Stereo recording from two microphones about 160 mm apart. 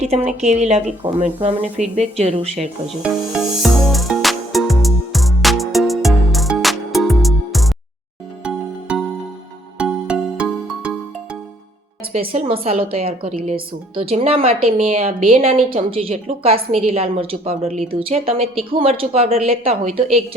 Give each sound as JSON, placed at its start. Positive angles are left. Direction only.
{"t": 0.0, "sound": "a woman's voice", "side_deg": -40}
{"t": 3.0, "sound": "music", "side_deg": -5}
{"t": 9.7, "sound": "music", "side_deg": -5}
{"t": 12.3, "sound": "a woman's voice", "side_deg": -35}